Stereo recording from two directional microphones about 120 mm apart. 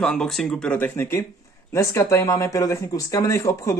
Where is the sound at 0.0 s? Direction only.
5° left (ahead or behind).